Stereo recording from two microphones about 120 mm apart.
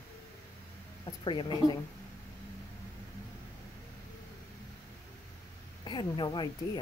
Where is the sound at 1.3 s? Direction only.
40° left (ahead or behind).